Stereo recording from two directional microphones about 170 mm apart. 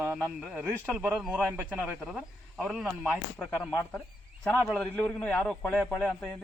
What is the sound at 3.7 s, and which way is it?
A man's voice, 15° left (ahead or behind).